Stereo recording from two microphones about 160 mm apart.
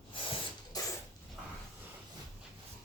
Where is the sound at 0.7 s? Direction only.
25° left (ahead or behind).